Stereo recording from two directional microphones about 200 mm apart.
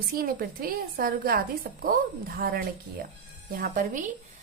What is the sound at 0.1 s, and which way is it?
A woman's voice, 45° right (ahead or behind).